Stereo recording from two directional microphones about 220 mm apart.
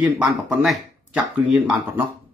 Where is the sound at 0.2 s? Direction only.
Centre (ahead or behind).